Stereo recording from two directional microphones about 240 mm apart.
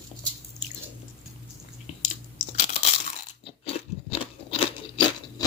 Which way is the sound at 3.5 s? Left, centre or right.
Left.